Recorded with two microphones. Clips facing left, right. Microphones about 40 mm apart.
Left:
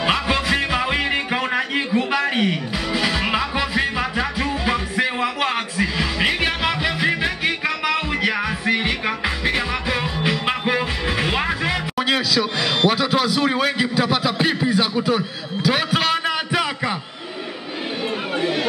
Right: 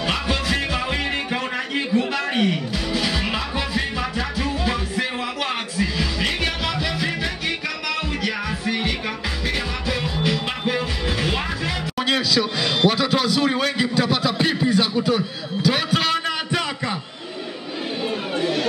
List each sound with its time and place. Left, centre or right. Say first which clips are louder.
0.0 s music: left 3 dB; centre
12.0 s a man's voice: even; centre
18.4 s chatter: even; centre